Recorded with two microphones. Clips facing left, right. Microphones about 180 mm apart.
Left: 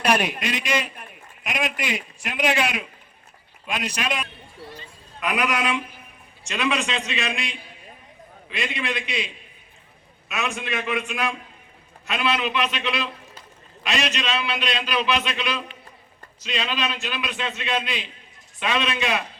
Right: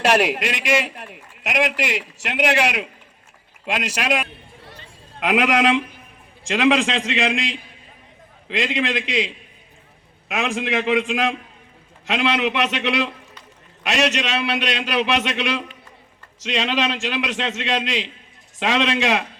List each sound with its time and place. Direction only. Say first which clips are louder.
0.0 s a man's voice: right 4 dB; 90° right
4.8 s a sound: right 4 dB; 90° right
6.5 s a man's voice: right 7 dB; 90° right